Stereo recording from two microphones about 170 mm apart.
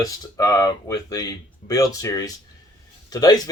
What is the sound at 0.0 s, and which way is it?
Speech, 20° left (ahead or behind).